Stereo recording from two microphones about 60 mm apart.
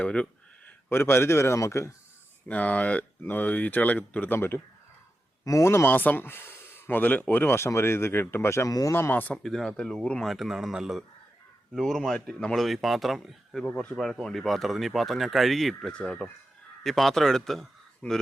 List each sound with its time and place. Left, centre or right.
0.0 s a sound: left
0.9 s a man's voice: left
2.5 s speech: left
4.4 s a man's voice: left
5.9 s speech: left
8.6 s speech: left
8.9 s speech: left
9.3 s speech: centre
10.2 s speech: centre
11.7 s speech: centre
15.9 s speech: centre
18.0 s speech: centre